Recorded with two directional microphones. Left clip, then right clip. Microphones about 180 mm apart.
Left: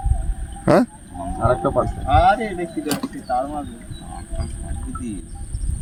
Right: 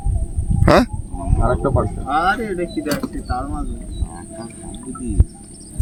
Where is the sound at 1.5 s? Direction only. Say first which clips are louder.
Left 1 dB; 20° left (ahead or behind).